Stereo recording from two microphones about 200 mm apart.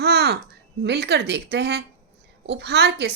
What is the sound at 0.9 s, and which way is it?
A woman's voice, 55° right (ahead or behind).